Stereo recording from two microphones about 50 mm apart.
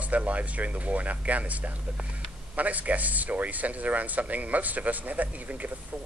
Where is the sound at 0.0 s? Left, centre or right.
Right.